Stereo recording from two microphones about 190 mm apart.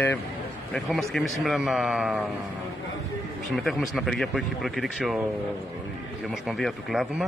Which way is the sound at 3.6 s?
Centre (ahead or behind).